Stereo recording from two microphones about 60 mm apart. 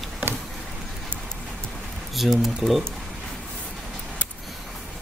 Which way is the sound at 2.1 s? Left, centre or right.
Centre.